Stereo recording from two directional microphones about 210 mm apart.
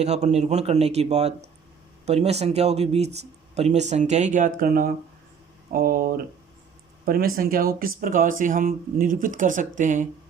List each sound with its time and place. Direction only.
0.0 s speech: 30° right (ahead or behind)